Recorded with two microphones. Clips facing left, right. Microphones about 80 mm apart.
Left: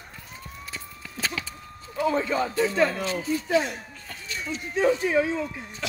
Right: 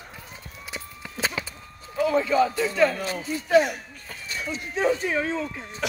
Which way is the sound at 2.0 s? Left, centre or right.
Left.